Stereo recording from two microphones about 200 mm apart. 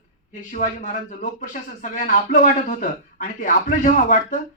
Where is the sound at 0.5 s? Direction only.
40° left (ahead or behind).